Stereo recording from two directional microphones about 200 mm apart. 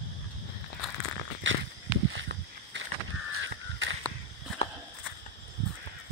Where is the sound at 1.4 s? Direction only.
70° right (ahead or behind).